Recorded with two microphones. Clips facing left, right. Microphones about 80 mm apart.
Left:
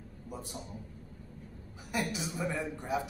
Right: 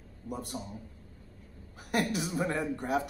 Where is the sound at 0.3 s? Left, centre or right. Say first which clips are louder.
Right 5 dB; right.